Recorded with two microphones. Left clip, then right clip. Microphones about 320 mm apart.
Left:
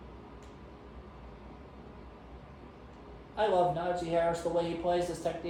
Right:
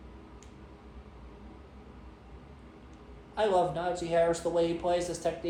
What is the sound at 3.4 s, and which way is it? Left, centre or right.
A man's voice, right.